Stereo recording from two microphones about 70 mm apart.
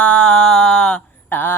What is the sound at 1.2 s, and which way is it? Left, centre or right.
Mantra, left.